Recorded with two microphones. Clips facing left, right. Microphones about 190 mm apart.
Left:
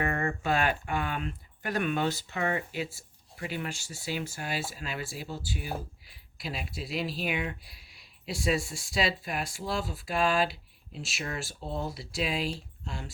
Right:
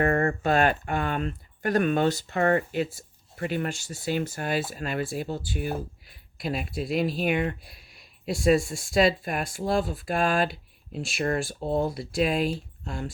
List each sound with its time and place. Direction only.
0.0 s speech: 45° right (ahead or behind)